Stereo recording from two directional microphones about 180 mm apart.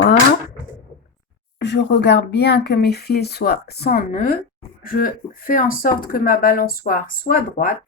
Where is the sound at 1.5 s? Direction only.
75° left (ahead or behind); by 7.8 s 45° left (ahead or behind).